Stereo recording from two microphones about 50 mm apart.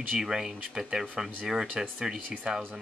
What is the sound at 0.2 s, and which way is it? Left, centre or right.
Speech, centre.